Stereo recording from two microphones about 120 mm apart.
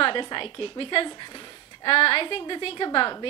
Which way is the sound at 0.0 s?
40° left (ahead or behind).